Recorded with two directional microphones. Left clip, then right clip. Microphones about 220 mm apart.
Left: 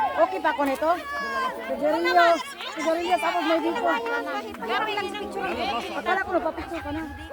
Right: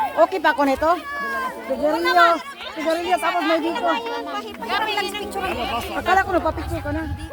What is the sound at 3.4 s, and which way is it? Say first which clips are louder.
Speech: right 3 dB; 35° right (ahead or behind).